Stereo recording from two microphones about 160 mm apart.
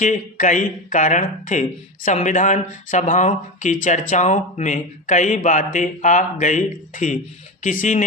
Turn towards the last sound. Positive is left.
turn(degrees=50)  # may be behind; listen again after turning